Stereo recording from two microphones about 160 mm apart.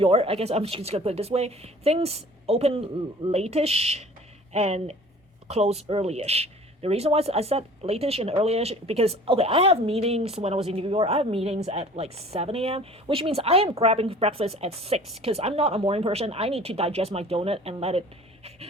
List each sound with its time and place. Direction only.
0.0 s speech: 35° right (ahead or behind)